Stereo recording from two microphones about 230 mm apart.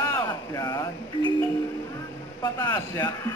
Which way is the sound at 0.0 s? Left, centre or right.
Centre.